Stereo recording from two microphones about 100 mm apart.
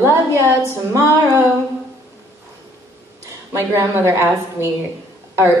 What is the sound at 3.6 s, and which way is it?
Speech, 25° right (ahead or behind).